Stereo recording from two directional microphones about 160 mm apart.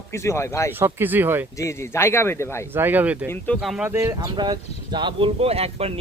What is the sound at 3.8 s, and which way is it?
Speech, 20° right (ahead or behind).